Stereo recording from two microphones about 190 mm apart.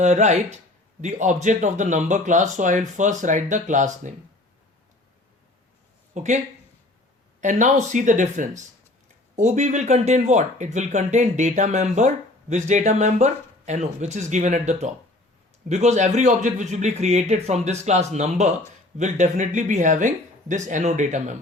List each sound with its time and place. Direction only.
0.0 s speech: 40° right (ahead or behind)
6.1 s speech: 40° right (ahead or behind)
7.4 s speech: 40° right (ahead or behind)